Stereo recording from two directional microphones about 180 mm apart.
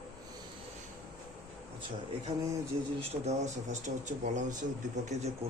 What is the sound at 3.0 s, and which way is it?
Speech, 40° right (ahead or behind).